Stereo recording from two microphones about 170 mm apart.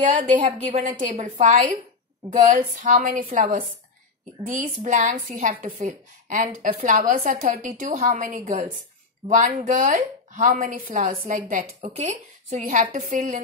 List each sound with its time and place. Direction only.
0.0 s a woman's voice: 45° right (ahead or behind)